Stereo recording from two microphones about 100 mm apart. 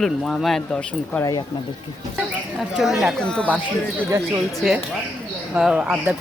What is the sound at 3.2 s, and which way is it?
Speech, 10° left (ahead or behind).